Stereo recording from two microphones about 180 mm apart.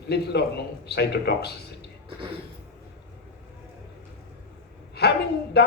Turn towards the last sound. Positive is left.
turn(degrees=65)  # may be behind; listen again after turning